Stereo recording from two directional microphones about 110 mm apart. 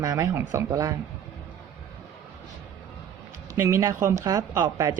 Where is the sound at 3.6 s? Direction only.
25° right (ahead or behind).